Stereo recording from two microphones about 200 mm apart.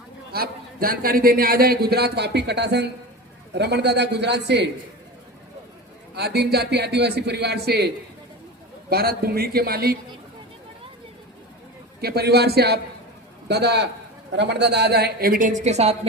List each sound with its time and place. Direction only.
0.3 s a man's voice: 50° right (ahead or behind)
6.1 s speech: 55° right (ahead or behind)
8.9 s a man's voice: 50° right (ahead or behind)
11.9 s a man's voice: 50° right (ahead or behind); by 16.0 s 30° right (ahead or behind)